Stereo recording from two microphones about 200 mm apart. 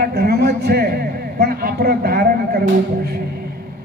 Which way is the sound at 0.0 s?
55° right (ahead or behind).